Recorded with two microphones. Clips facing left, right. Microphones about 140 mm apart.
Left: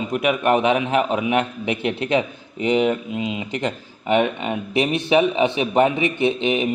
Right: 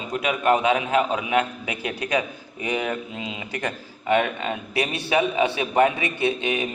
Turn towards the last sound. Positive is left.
turn(degrees=20)  # may be behind; listen again after turning